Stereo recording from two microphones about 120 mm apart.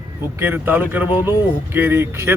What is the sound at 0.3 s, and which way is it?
A man's voice, 20° right (ahead or behind).